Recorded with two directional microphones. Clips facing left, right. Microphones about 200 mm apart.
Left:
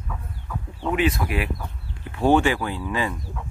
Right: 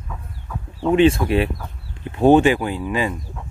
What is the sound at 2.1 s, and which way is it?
Speech, 20° right (ahead or behind).